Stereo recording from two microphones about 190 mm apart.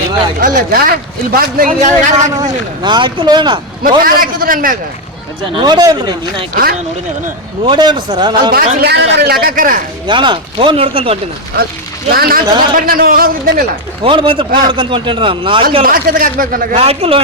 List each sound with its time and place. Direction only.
0.3 s speech: 50° right (ahead or behind)
2.3 s speech: 20° right (ahead or behind)
3.8 s speech: 50° right (ahead or behind)
5.5 s speech: 25° right (ahead or behind)
6.5 s speech: 50° right (ahead or behind)
7.6 s speech: 25° right (ahead or behind)
8.5 s a man's voice: 60° right (ahead or behind)
10.1 s speech: 25° right (ahead or behind)
12.1 s speech: 55° right (ahead or behind)
14.0 s speech: 25° right (ahead or behind)
15.8 s speech: 45° right (ahead or behind)
16.7 s a man's voice: 30° right (ahead or behind)